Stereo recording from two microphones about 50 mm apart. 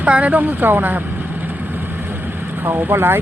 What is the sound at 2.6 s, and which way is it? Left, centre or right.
Speech, right.